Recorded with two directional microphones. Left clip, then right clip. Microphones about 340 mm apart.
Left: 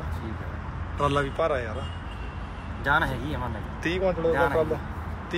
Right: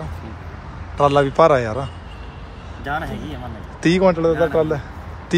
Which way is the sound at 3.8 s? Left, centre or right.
Centre.